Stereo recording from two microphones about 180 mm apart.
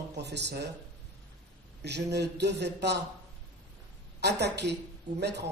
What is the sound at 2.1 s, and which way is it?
Speech, 70° right (ahead or behind).